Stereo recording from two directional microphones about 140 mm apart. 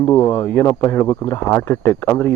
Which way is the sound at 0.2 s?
25° left (ahead or behind).